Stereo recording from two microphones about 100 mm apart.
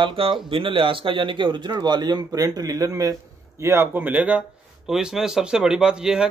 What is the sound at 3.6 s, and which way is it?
Speech, 25° right (ahead or behind).